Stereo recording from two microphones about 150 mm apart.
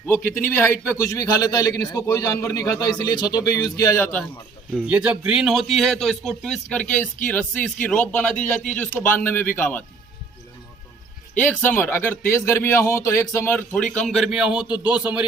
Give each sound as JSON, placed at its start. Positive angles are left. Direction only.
{"t": 0.1, "sound": "a man's voice", "side_deg": 15}
{"t": 4.7, "sound": "a man's voice", "side_deg": -5}
{"t": 11.3, "sound": "a man's voice", "side_deg": 10}